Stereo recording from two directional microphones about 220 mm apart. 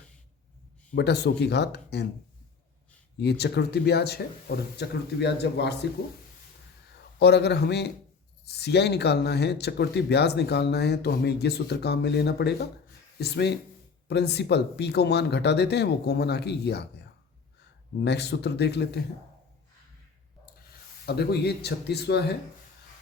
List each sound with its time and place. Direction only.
0.9 s speech: 50° left (ahead or behind)
3.2 s speech: 50° left (ahead or behind)
7.2 s speech: 50° left (ahead or behind)
21.1 s speech: 45° left (ahead or behind)